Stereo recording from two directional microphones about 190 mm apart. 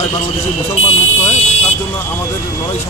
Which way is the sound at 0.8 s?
35° left (ahead or behind).